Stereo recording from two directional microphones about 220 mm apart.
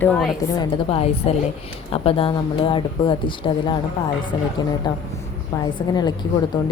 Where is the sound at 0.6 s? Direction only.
25° left (ahead or behind).